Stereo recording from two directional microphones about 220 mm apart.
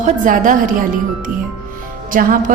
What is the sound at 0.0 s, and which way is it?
Speech, 35° right (ahead or behind).